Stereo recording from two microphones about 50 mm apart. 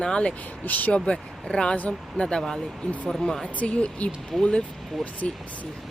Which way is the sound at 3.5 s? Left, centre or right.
Left.